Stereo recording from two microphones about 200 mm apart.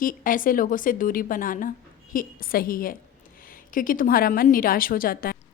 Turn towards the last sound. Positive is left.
turn(degrees=45)  # may be behind; listen again after turning